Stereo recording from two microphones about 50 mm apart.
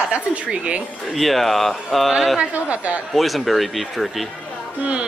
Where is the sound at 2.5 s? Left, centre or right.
Right.